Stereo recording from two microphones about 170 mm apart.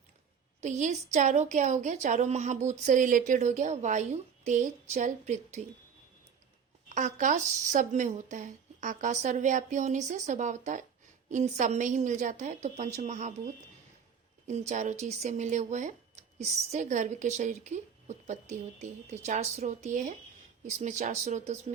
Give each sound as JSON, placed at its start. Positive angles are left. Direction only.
{"t": 0.6, "sound": "speech", "side_deg": -45}
{"t": 6.8, "sound": "speech", "side_deg": -45}
{"t": 14.4, "sound": "speech", "side_deg": -40}